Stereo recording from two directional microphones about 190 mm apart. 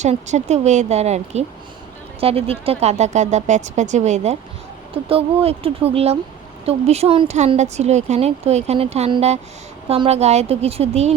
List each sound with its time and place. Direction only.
0.0 s speech: 35° right (ahead or behind)